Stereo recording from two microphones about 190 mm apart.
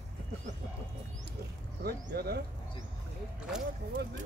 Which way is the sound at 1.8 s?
55° right (ahead or behind).